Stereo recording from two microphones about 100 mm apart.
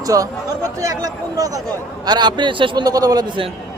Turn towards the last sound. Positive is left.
turn(degrees=-40)  # may be behind; listen again after turning